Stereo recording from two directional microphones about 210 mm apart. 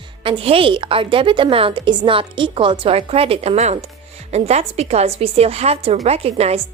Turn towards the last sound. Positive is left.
turn(degrees=-30)  # may be behind; listen again after turning